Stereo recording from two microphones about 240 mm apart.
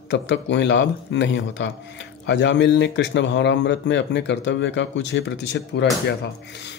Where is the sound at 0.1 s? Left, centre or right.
Left.